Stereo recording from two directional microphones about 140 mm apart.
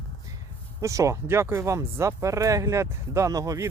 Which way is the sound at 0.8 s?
20° right (ahead or behind).